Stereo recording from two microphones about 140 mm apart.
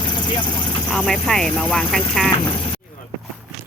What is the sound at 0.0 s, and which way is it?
Vehicle, 35° left (ahead or behind).